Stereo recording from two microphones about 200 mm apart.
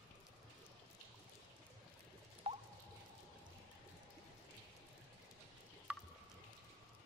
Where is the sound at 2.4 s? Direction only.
30° right (ahead or behind).